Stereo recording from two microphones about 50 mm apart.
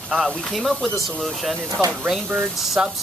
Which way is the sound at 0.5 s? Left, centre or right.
Centre.